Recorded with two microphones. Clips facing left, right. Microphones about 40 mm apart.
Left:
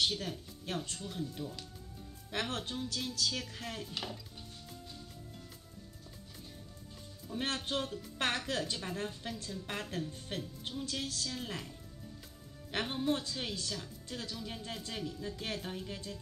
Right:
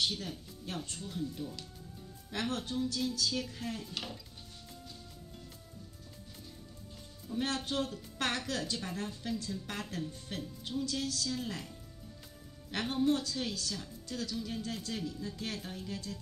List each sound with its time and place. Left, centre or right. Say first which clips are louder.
0.0 s a woman's voice: left 1 dB; left
3.8 s speech: even; centre
7.3 s a woman's voice: right 2 dB; left
12.7 s speech: right 3 dB; centre
13.1 s speech: right 2 dB; left